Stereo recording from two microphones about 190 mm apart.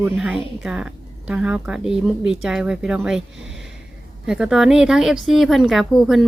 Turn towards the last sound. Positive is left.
turn(degrees=0)  # may be behind; listen again after turning